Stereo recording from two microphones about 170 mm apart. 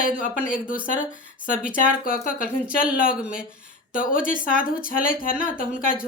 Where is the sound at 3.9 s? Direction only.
55° left (ahead or behind).